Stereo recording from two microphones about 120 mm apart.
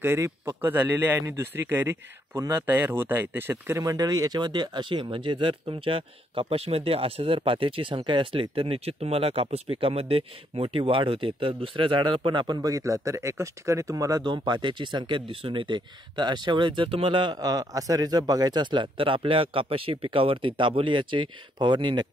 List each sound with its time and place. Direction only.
0.0 s a man's voice: 25° right (ahead or behind); by 22.0 s 40° right (ahead or behind)